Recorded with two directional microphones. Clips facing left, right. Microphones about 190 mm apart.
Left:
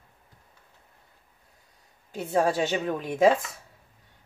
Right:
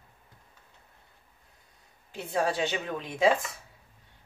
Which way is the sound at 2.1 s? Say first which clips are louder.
Left 4 dB; 45° left (ahead or behind).